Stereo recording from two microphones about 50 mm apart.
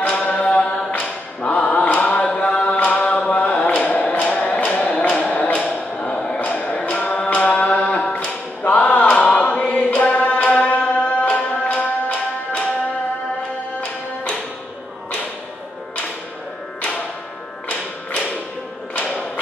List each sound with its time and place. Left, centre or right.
0.0 s chant: left
0.9 s a capella: left
3.3 s a sound: left
11.3 s music: left
17.6 s music: left